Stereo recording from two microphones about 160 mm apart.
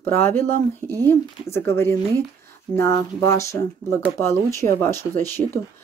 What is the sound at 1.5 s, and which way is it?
Speech, 15° left (ahead or behind).